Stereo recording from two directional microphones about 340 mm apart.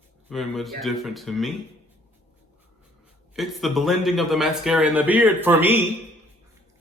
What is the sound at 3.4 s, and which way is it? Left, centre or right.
Speech, centre.